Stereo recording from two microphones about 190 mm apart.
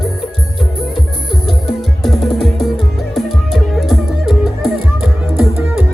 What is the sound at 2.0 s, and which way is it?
Music, centre (ahead or behind).